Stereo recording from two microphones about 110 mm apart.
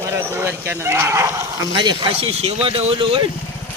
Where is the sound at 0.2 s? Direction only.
20° right (ahead or behind).